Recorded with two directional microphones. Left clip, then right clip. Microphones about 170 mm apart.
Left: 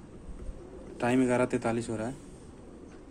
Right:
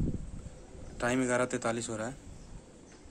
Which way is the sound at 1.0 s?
15° right (ahead or behind).